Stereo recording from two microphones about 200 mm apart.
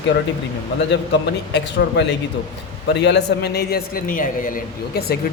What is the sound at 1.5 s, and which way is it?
A man's voice, 60° left (ahead or behind).